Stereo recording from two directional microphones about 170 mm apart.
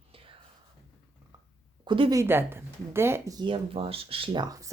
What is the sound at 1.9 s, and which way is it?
Speech, 25° right (ahead or behind).